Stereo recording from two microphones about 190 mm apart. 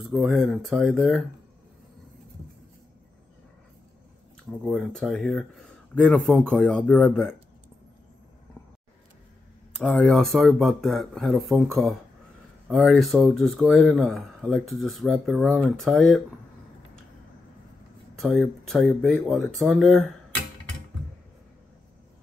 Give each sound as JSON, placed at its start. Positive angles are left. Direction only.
{"t": 0.1, "sound": "speech", "side_deg": 0}
{"t": 4.6, "sound": "speech", "side_deg": 0}
{"t": 9.8, "sound": "speech", "side_deg": 5}
{"t": 18.2, "sound": "speech", "side_deg": 0}